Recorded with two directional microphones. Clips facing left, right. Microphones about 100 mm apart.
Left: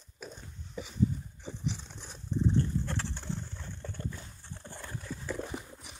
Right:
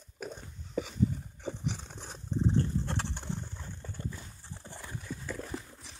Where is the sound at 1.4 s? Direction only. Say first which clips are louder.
Right 2 dB; 50° right (ahead or behind).